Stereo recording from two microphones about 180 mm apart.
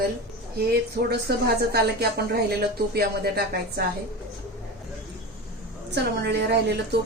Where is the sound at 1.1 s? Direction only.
60° right (ahead or behind).